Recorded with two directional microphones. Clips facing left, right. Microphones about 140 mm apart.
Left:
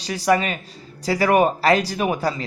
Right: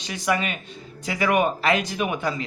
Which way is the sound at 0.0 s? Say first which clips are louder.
Left 5 dB; 35° left (ahead or behind).